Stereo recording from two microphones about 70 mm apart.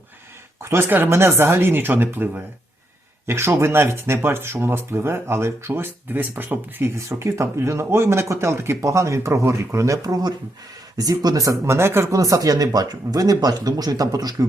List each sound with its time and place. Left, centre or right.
0.6 s speech: right
6.9 s speech: right
12.1 s speech: right